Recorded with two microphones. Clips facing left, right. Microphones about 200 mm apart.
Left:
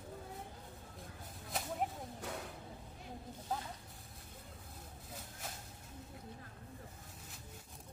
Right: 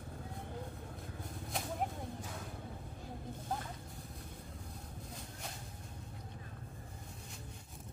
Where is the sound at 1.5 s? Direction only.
5° left (ahead or behind).